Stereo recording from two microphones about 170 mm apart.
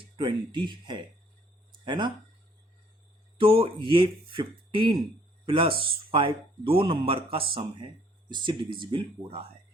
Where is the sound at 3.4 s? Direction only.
30° right (ahead or behind).